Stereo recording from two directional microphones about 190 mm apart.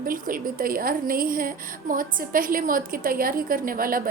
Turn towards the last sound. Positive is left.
turn(degrees=-50)  # may be behind; listen again after turning